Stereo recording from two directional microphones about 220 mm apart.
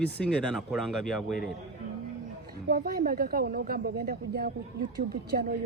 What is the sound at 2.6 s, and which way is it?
A woman's voice, 45° right (ahead or behind).